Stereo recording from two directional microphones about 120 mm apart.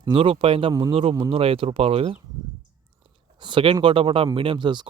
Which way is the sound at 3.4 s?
40° right (ahead or behind).